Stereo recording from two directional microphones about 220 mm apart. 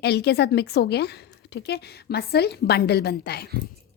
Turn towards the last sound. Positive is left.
turn(degrees=45)  # may be behind; listen again after turning